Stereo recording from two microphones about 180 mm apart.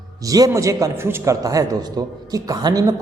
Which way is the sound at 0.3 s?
20° right (ahead or behind).